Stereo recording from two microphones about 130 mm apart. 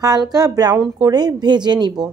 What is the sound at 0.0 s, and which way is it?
Speech, 30° right (ahead or behind).